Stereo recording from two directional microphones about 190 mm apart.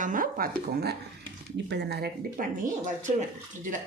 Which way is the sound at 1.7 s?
60° right (ahead or behind).